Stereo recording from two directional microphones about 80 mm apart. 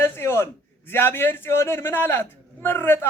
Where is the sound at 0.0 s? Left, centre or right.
Left.